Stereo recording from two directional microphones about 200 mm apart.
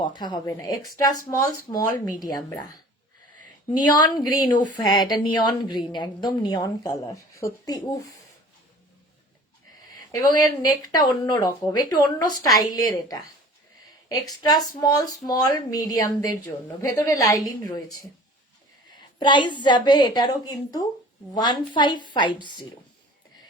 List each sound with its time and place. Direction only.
0.0 s a woman's voice: 20° left (ahead or behind)
3.8 s a woman's voice: 20° left (ahead or behind)
10.1 s a woman's voice: 15° left (ahead or behind)
19.2 s a woman's voice: 25° left (ahead or behind)